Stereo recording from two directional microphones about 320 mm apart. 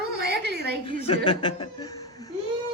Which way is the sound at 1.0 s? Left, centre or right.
Centre.